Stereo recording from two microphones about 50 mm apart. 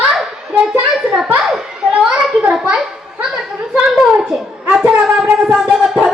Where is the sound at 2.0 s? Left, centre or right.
Right.